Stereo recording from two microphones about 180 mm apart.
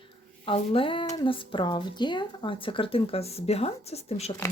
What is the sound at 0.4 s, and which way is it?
Speech, 30° left (ahead or behind).